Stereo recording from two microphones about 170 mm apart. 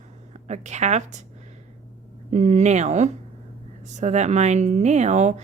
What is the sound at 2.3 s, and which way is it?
Speech, 45° right (ahead or behind).